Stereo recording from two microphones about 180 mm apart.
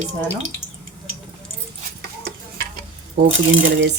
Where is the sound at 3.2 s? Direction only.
70° right (ahead or behind).